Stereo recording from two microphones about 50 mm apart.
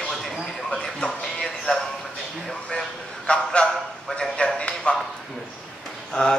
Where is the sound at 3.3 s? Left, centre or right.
Left.